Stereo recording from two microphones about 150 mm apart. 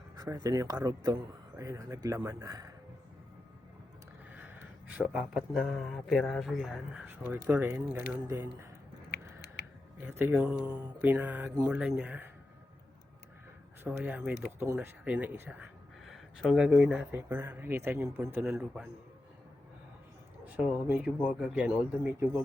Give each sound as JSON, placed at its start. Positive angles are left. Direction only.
{"t": 0.2, "sound": "a man's voice", "side_deg": -25}
{"t": 4.4, "sound": "speech", "side_deg": -10}
{"t": 7.0, "sound": "speech", "side_deg": -10}
{"t": 9.0, "sound": "a sound", "side_deg": 90}
{"t": 10.0, "sound": "speech", "side_deg": -15}
{"t": 13.8, "sound": "speech", "side_deg": -10}
{"t": 20.4, "sound": "speech", "side_deg": -10}